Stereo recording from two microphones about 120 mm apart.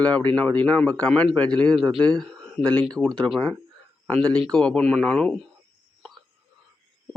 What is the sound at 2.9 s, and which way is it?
Speech, 5° left (ahead or behind).